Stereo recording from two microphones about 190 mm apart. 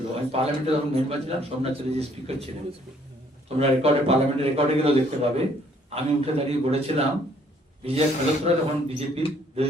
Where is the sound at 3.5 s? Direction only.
30° right (ahead or behind).